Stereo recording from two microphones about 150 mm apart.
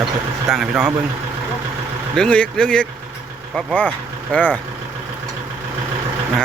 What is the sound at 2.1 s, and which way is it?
Speech, 5° left (ahead or behind).